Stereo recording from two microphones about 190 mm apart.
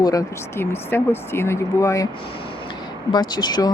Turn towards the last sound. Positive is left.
turn(degrees=20)  # may be behind; listen again after turning